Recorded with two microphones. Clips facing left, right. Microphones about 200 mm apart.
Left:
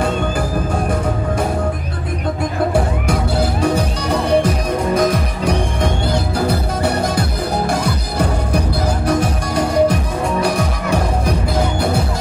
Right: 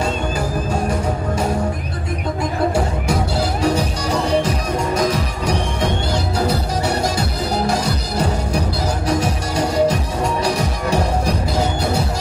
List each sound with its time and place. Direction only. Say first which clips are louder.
2.7 s music: left 2 dB; 55° left (ahead or behind)
9.0 s music: left 1 dB; 55° left (ahead or behind)